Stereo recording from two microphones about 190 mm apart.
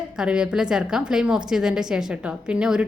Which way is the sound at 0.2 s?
5° right (ahead or behind).